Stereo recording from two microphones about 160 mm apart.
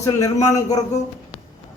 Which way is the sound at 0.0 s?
20° left (ahead or behind).